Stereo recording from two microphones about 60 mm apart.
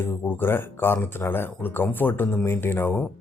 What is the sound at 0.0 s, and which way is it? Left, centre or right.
Speech, left.